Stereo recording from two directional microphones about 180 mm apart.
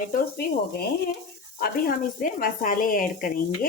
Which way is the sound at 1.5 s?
55° left (ahead or behind).